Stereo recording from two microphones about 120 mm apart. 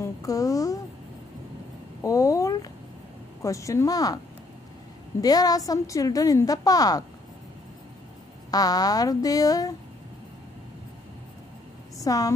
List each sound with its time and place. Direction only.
0.0 s a sound: 30° left (ahead or behind)
2.0 s a sound: 25° left (ahead or behind)
3.4 s speech: 25° left (ahead or behind)
5.2 s a woman's voice: 30° left (ahead or behind)
8.5 s a woman's voice: 30° left (ahead or behind)
12.0 s a woman's voice: 30° left (ahead or behind)